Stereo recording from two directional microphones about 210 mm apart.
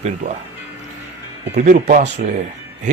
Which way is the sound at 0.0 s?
35° right (ahead or behind).